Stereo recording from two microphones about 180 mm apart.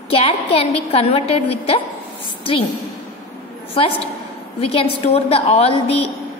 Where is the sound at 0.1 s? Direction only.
30° left (ahead or behind).